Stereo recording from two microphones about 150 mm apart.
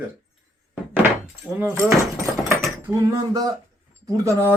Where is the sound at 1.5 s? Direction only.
15° right (ahead or behind).